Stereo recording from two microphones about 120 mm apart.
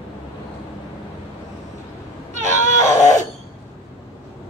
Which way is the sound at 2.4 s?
25° left (ahead or behind).